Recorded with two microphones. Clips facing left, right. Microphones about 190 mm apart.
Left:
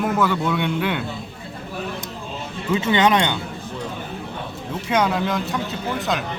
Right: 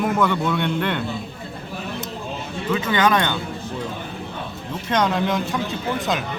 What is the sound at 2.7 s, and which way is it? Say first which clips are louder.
Speech: left 2 dB; 25° left (ahead or behind).